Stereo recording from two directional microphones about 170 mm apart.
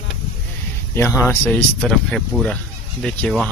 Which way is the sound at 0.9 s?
15° left (ahead or behind).